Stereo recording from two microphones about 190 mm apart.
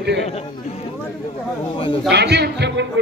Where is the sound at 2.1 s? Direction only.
60° right (ahead or behind).